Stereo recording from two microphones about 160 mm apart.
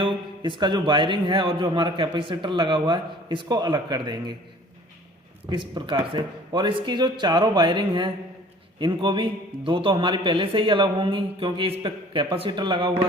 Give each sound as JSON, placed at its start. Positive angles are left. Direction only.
{"t": 0.0, "sound": "speech", "side_deg": -30}
{"t": 5.5, "sound": "a man's voice", "side_deg": -30}